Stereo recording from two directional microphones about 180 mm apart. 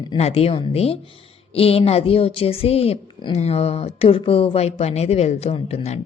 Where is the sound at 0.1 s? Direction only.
35° left (ahead or behind).